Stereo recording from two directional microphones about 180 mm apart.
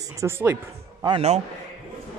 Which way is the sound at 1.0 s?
30° right (ahead or behind).